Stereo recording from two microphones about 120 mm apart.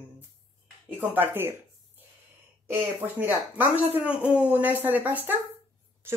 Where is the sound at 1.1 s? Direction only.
20° right (ahead or behind).